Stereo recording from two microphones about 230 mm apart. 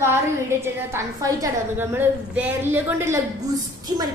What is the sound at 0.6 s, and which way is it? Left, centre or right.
A woman's voice, centre.